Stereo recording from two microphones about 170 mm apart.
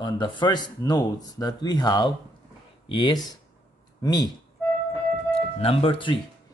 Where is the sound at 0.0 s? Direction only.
25° left (ahead or behind).